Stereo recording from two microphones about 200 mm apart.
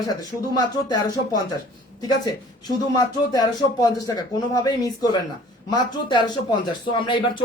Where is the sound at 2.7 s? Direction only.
20° left (ahead or behind).